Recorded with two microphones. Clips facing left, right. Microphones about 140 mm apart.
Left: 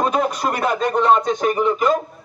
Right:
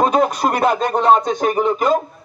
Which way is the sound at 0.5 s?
40° right (ahead or behind).